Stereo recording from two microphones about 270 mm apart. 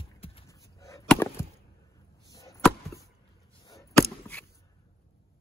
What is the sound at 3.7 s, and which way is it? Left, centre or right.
Chop, centre.